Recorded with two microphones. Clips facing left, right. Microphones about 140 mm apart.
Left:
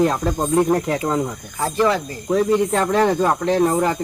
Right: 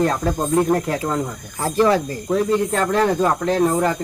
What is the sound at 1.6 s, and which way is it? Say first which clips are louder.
Speech: right 2 dB; 35° right (ahead or behind).